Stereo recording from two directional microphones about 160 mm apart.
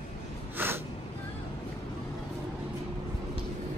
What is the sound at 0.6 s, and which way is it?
Gasp, 15° right (ahead or behind).